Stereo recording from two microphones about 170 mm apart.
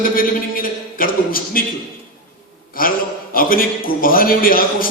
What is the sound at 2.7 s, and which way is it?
A man's voice, 55° left (ahead or behind).